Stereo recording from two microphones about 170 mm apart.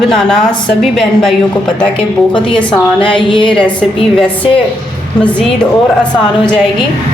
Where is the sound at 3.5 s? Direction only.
5° left (ahead or behind).